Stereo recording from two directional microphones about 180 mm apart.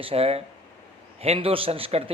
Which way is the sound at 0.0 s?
35° right (ahead or behind).